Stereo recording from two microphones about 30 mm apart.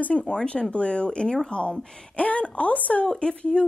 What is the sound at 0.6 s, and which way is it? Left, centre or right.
A woman's voice, left.